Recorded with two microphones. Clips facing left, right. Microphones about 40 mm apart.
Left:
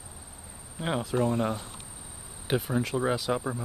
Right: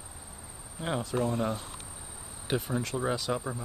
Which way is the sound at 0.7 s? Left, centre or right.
Centre.